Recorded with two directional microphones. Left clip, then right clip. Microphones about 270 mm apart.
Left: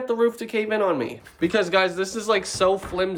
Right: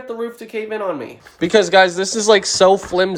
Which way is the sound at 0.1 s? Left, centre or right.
Centre.